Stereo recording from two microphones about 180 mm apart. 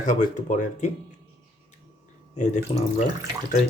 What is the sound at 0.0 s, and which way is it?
Speech, 45° left (ahead or behind).